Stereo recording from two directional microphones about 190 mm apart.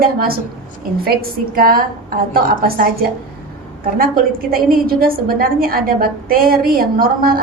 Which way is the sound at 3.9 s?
50° right (ahead or behind).